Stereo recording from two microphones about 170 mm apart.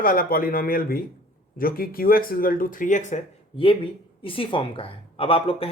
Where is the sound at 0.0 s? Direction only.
55° left (ahead or behind).